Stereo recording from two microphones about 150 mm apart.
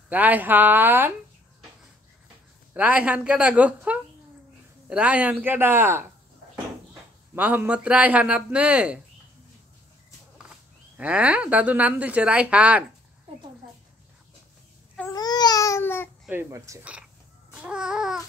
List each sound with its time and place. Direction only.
0.1 s speech: 10° right (ahead or behind)
2.7 s speech: 10° right (ahead or behind)
7.3 s speech: 10° right (ahead or behind)
10.5 s speech: 10° right (ahead or behind)
15.0 s baby cry: 25° left (ahead or behind)
16.3 s speech: 20° right (ahead or behind)
17.6 s babbling: 5° right (ahead or behind)